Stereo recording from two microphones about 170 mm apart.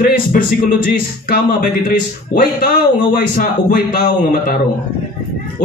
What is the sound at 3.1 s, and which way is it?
Speech, 55° left (ahead or behind).